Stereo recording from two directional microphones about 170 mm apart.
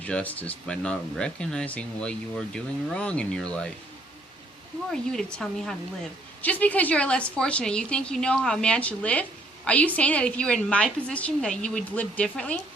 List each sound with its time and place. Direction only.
0.0 s speech: 10° left (ahead or behind)
4.9 s speech: 5° left (ahead or behind)